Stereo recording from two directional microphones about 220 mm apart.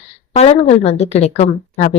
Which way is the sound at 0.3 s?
30° left (ahead or behind).